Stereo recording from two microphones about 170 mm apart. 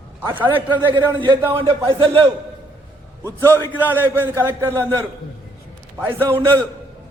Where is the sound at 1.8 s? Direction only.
25° right (ahead or behind).